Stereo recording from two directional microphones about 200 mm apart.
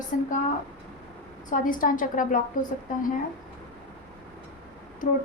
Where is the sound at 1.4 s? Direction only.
40° left (ahead or behind).